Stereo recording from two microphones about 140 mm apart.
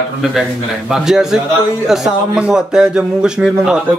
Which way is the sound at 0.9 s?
5° right (ahead or behind).